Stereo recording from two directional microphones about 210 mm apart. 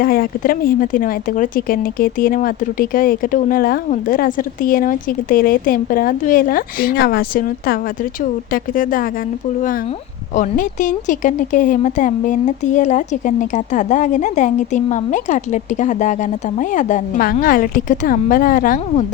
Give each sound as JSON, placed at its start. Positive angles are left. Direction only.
{"t": 0.0, "sound": "speech", "side_deg": 45}
{"t": 10.3, "sound": "speech", "side_deg": 35}